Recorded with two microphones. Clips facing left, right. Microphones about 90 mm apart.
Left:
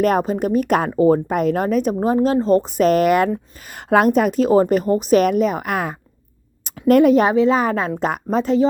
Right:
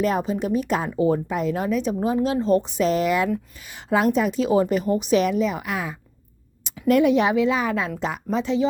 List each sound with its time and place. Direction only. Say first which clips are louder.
0.0 s speech: left 5 dB; 50° left (ahead or behind)
0.9 s speech: left 6 dB; 40° left (ahead or behind)